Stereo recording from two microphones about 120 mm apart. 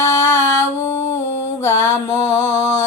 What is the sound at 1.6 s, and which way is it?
Mantra, 20° left (ahead or behind).